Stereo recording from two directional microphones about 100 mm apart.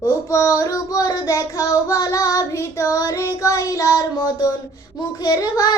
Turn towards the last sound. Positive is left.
turn(degrees=40)  # may be behind; listen again after turning